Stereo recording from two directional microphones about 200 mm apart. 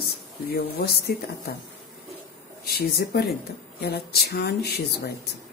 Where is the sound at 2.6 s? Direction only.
50° left (ahead or behind).